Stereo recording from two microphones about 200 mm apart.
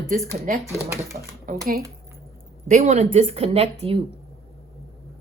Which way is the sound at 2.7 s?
35° right (ahead or behind).